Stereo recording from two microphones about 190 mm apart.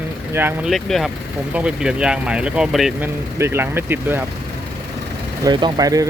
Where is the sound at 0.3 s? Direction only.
10° right (ahead or behind).